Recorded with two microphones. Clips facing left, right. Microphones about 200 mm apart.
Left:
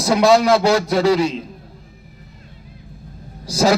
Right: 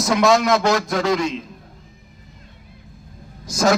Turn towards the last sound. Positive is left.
turn(degrees=30)  # may be behind; listen again after turning